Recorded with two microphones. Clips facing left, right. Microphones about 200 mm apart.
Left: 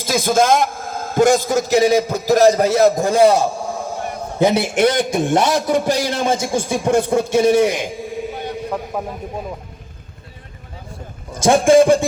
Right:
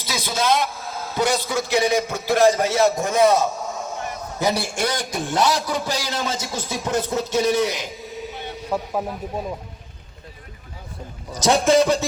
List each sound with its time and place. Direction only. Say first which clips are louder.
0.0 s a man's voice: left 9 dB; 50° left (ahead or behind); by 4.0 s 30° left (ahead or behind)
4.1 s a sound: left 9 dB; 30° left (ahead or behind)
4.5 s a man's voice: left 9 dB; 25° left (ahead or behind)
4.9 s a man's voice: left 6 dB; 50° left (ahead or behind)
8.7 s speech: right 4 dB; 5° right (ahead or behind)
11.4 s a man's voice: left 5 dB; 50° left (ahead or behind)